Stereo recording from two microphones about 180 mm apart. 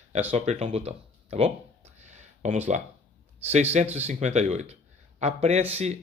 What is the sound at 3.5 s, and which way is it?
Speech, 35° right (ahead or behind).